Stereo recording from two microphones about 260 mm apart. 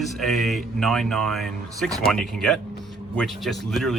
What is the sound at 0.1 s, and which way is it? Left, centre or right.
Speech, centre.